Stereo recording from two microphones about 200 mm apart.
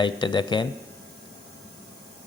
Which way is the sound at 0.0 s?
25° left (ahead or behind).